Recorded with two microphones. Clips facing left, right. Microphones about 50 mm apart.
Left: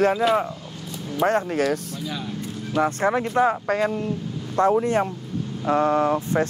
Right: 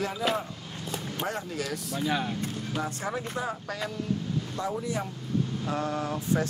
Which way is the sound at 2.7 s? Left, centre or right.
Left.